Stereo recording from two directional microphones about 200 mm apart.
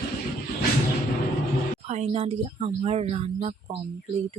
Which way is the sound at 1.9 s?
35° right (ahead or behind).